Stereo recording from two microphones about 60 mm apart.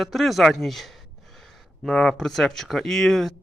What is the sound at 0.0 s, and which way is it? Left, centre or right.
Speech, centre.